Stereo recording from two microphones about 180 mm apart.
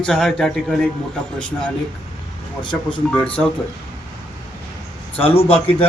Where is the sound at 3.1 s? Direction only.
5° left (ahead or behind).